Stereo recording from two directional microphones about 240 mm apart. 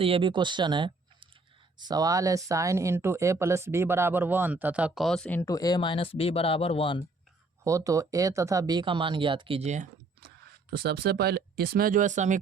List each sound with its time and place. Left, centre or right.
0.0 s speech: right; by 7.0 s left
7.6 s speech: centre; by 12.4 s right